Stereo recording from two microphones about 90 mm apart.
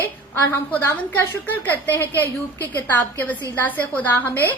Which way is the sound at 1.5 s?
25° left (ahead or behind).